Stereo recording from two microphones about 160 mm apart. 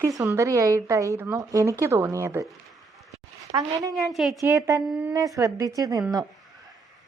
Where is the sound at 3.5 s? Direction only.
20° right (ahead or behind).